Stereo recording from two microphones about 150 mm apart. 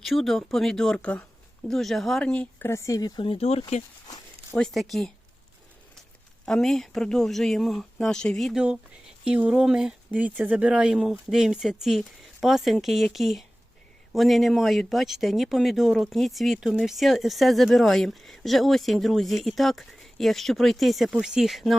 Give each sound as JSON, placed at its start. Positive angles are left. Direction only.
{"t": 0.0, "sound": "speech", "side_deg": 0}
{"t": 4.5, "sound": "speech", "side_deg": 0}
{"t": 6.4, "sound": "speech", "side_deg": 5}